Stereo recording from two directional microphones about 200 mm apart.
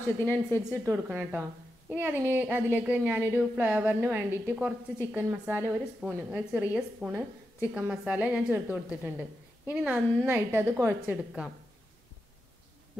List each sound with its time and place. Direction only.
0.0 s speech: 10° left (ahead or behind)
0.8 s a woman's voice: 10° right (ahead or behind)